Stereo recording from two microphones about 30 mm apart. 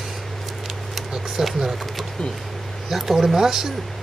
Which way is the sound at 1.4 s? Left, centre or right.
Centre.